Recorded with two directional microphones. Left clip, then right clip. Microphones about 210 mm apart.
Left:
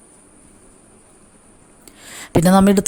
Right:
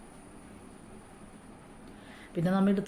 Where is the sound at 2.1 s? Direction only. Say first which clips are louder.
Left 17 dB; 50° left (ahead or behind).